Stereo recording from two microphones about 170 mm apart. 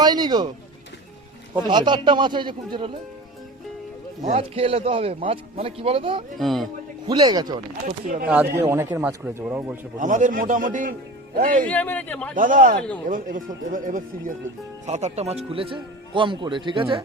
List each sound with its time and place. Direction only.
0.0 s a man's voice: 25° right (ahead or behind)
1.5 s a man's voice: 25° right (ahead or behind)
4.2 s speech: 35° right (ahead or behind)
6.3 s speech: centre (ahead or behind)
7.1 s a man's voice: 25° right (ahead or behind); by 9.7 s 10° right (ahead or behind)
10.0 s a man's voice: 50° right (ahead or behind)
11.6 s speech: 10° left (ahead or behind)
12.3 s a man's voice: 50° right (ahead or behind)
14.8 s speech: 40° right (ahead or behind)